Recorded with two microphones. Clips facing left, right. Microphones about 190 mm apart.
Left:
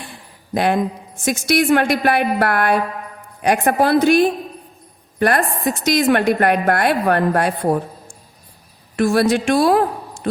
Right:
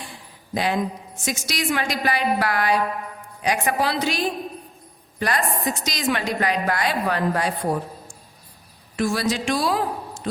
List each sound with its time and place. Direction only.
0.0 s a sound: 55° left (ahead or behind)
1.2 s a woman's voice: 55° left (ahead or behind)
9.0 s a woman's voice: 60° left (ahead or behind)